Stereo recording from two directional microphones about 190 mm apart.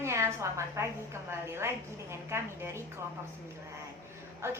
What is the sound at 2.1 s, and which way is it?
Speech, 15° right (ahead or behind).